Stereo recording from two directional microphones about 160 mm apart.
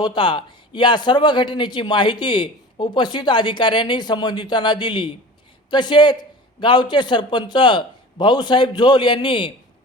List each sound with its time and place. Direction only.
0.0 s speech: 30° left (ahead or behind)